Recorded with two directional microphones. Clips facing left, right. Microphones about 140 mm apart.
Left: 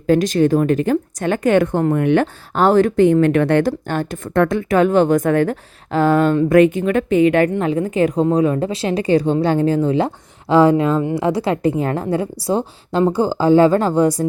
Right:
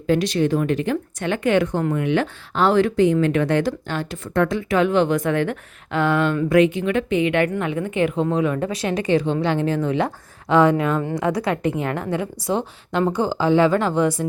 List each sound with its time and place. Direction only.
0.1 s a woman's voice: 45° left (ahead or behind)